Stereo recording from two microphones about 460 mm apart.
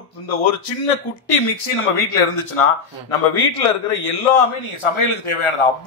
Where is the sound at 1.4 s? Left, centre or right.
Left.